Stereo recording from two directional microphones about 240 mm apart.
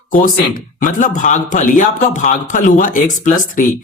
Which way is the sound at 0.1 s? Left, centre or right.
Left.